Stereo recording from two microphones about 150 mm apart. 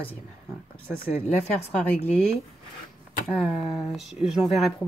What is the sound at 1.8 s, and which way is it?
Speech, 10° left (ahead or behind).